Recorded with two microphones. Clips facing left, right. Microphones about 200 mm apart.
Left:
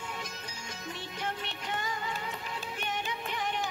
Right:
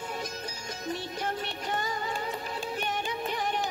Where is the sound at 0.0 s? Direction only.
40° right (ahead or behind).